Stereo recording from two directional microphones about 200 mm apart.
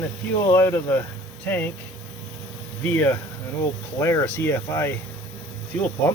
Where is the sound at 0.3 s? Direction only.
10° left (ahead or behind).